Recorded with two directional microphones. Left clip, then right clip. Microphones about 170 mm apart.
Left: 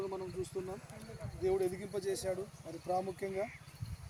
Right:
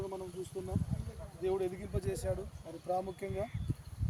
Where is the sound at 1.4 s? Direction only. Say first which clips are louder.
Left 1 dB; centre (ahead or behind).